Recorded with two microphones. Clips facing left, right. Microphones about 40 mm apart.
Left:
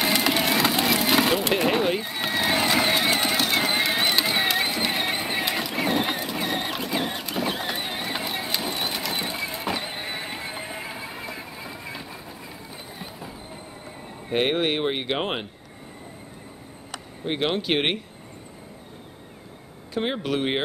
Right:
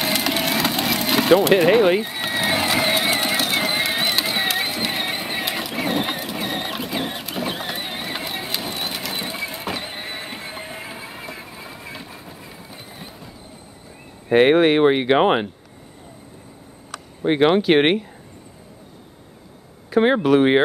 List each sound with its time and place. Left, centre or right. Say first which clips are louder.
0.0 s vehicle: even; centre
14.3 s speech: right 9 dB; centre
14.9 s speech: right 10 dB; right
17.3 s speech: right 9 dB; centre
17.6 s speech: right 8 dB; centre
20.0 s speech: right 10 dB; centre